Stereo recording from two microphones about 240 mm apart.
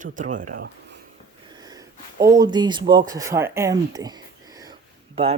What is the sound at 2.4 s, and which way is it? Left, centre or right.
Speech, centre.